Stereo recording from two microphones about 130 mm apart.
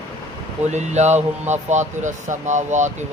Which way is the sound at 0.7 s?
60° right (ahead or behind).